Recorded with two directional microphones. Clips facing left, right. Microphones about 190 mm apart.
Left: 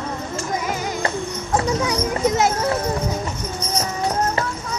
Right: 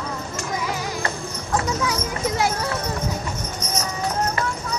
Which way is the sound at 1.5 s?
25° left (ahead or behind).